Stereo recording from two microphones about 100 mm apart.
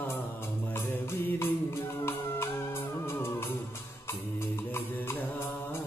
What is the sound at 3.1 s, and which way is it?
Music, 25° left (ahead or behind).